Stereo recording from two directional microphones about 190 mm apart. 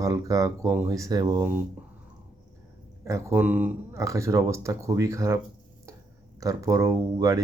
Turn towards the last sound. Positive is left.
turn(degrees=-15)  # may be behind; listen again after turning